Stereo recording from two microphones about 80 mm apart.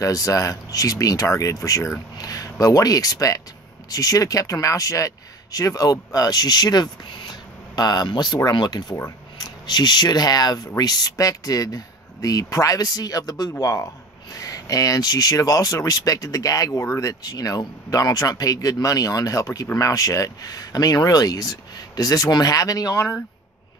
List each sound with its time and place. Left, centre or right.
0.0 s speech: left
17.1 s speech: left